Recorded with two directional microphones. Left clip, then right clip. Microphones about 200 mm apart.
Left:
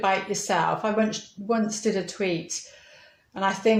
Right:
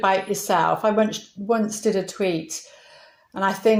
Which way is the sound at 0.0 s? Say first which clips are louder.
Right 4 dB; 35° right (ahead or behind).